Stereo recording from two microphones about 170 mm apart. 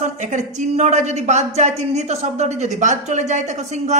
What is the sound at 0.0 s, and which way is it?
A man's voice, 45° right (ahead or behind).